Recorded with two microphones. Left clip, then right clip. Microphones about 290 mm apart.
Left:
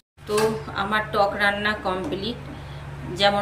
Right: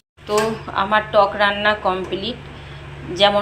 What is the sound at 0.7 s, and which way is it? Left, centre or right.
Speech, centre.